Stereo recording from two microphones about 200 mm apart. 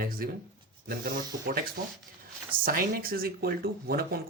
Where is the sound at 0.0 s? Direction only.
45° right (ahead or behind).